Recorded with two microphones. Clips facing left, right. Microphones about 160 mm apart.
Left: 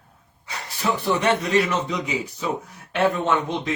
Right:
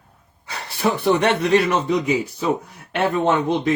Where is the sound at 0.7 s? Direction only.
60° right (ahead or behind).